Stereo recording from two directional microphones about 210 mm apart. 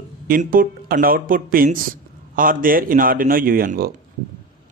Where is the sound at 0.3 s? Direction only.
40° right (ahead or behind).